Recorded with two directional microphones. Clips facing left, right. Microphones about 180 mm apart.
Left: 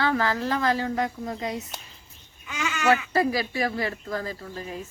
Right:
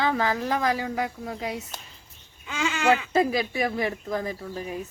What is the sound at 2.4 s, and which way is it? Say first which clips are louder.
Speech: right 1 dB; 30° right (ahead or behind).